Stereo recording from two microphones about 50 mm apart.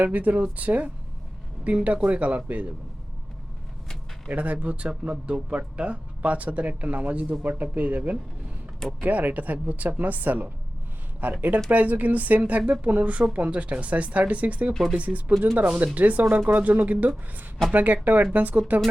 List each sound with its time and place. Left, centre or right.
0.0 s speech: right
4.3 s speech: right
14.7 s speech: centre
14.9 s speech: right